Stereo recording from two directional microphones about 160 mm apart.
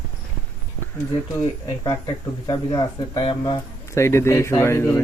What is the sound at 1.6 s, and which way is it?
Speech, 25° left (ahead or behind).